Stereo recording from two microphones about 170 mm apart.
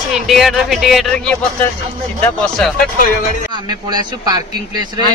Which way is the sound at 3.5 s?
25° right (ahead or behind).